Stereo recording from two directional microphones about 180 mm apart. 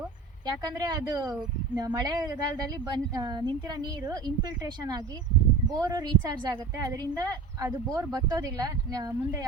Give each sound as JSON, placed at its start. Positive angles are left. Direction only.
{"t": 0.4, "sound": "speech", "side_deg": -20}